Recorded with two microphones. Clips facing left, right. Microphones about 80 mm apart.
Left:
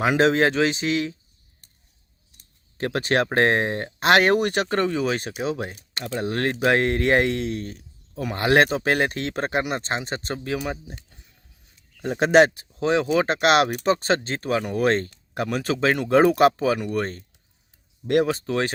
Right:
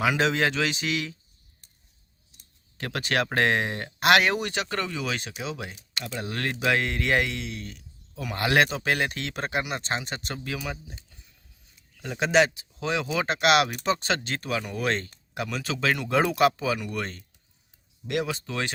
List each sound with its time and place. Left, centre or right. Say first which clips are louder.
0.0 s speech: left 5 dB; left
2.7 s speech: left 5 dB; left
4.3 s speech: left 7 dB; left
10.6 s speech: left 5 dB; left
12.0 s speech: left 6 dB; left
12.8 s speech: left 7 dB; left